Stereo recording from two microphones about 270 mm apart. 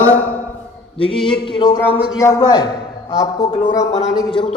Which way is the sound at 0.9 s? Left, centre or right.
Centre.